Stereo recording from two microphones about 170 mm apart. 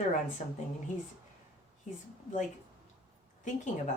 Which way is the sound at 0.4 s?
45° left (ahead or behind).